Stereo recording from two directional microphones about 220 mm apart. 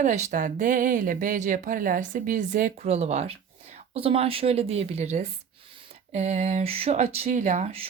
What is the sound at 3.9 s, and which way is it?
Speech, 25° right (ahead or behind).